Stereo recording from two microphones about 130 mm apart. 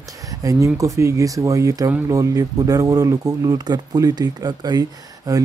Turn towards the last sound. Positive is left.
turn(degrees=-30)  # may be behind; listen again after turning